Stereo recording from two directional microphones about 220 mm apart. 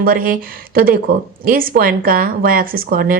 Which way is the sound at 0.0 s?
40° right (ahead or behind).